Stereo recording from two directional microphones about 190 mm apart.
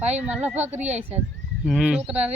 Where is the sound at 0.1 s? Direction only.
10° right (ahead or behind).